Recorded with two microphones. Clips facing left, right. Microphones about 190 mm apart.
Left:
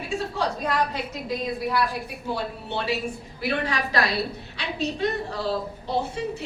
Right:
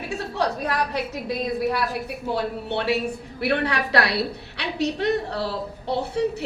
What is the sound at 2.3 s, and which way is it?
A man's voice, 65° right (ahead or behind).